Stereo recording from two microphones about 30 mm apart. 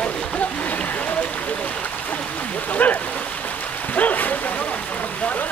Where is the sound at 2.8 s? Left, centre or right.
Left.